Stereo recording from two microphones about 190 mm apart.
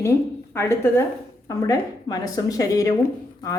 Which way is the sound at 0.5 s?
15° left (ahead or behind).